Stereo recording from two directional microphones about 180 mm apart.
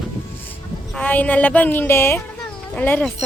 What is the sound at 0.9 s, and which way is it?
A woman's voice, 10° left (ahead or behind).